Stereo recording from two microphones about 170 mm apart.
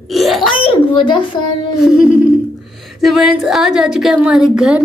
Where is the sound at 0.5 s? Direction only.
30° left (ahead or behind).